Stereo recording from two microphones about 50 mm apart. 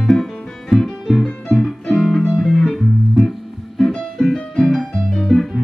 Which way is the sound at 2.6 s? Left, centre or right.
Centre.